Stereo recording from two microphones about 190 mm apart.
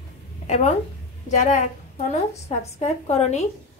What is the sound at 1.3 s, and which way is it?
Speech, 40° left (ahead or behind).